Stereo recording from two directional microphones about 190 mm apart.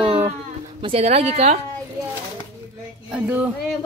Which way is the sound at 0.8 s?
30° right (ahead or behind).